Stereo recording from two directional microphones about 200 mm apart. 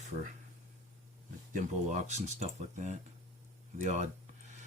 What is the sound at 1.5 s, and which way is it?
Speech, 35° right (ahead or behind).